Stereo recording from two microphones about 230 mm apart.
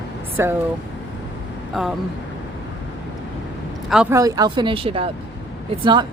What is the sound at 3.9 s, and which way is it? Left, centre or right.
Speech, centre.